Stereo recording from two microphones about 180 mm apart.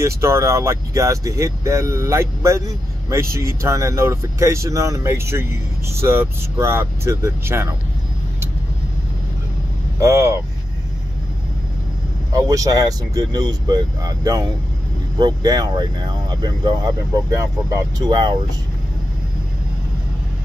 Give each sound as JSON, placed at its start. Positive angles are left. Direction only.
{"t": 0.0, "sound": "speech", "side_deg": -15}
{"t": 9.9, "sound": "speech", "side_deg": -15}
{"t": 12.3, "sound": "speech", "side_deg": -20}